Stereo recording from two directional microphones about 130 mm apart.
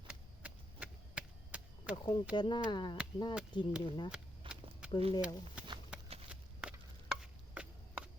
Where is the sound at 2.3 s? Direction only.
35° left (ahead or behind).